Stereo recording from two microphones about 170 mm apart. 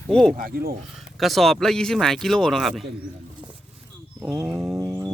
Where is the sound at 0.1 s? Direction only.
5° left (ahead or behind).